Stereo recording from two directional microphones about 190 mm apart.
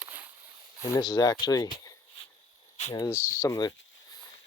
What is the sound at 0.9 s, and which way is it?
Speech, 20° left (ahead or behind).